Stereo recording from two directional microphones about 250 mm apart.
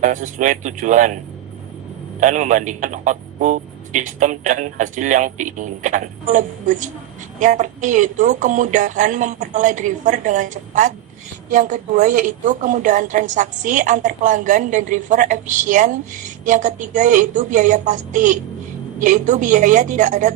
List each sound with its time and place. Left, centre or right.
0.0 s speech: right
2.2 s a man's voice: right